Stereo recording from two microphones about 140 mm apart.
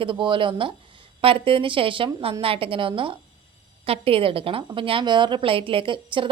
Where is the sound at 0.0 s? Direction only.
35° right (ahead or behind).